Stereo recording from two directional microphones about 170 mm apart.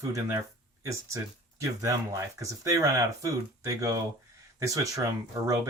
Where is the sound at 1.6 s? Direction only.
15° right (ahead or behind).